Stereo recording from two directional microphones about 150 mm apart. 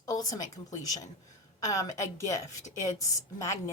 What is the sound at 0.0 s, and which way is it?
A woman's voice, 25° left (ahead or behind).